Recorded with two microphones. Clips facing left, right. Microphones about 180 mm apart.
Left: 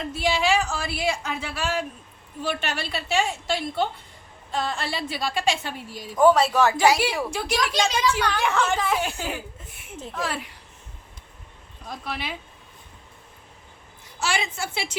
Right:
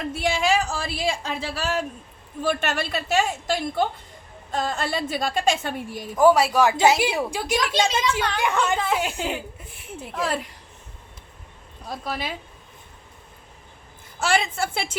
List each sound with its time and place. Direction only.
0.2 s a woman's voice: 50° right (ahead or behind)
6.1 s a woman's voice: 10° right (ahead or behind)
11.9 s speech: 40° right (ahead or behind)
14.2 s a woman's voice: 55° right (ahead or behind)